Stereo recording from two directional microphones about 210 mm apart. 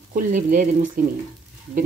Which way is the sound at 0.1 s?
40° right (ahead or behind).